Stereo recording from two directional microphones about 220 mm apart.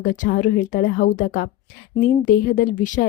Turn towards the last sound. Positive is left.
turn(degrees=35)  # may be behind; listen again after turning